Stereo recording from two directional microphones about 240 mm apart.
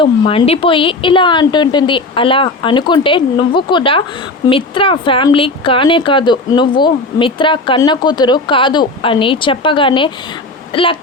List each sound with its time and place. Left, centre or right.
0.0 s speech: left